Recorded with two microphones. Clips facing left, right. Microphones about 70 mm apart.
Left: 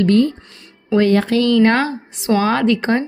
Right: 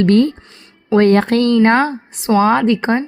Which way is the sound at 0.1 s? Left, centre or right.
Right.